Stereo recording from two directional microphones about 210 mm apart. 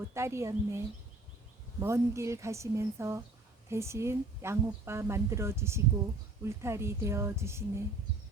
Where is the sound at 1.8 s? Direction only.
15° right (ahead or behind).